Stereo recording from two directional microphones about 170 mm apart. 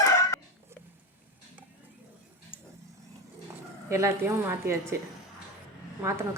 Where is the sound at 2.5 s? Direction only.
10° left (ahead or behind).